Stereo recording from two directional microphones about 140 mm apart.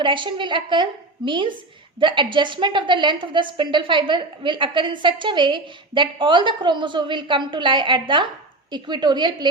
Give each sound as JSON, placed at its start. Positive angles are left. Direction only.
{"t": 0.0, "sound": "a woman's voice", "side_deg": -35}